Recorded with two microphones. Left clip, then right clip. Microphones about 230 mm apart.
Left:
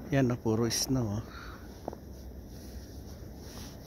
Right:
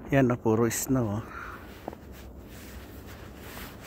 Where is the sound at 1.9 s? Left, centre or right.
Right.